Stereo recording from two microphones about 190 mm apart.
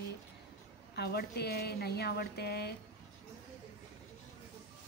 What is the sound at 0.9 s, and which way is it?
A woman's voice, 55° left (ahead or behind).